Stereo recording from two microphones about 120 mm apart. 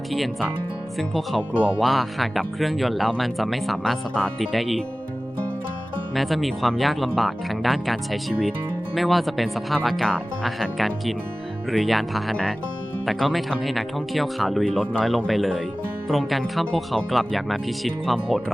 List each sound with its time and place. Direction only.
0.1 s speech: centre (ahead or behind)
6.1 s speech: centre (ahead or behind)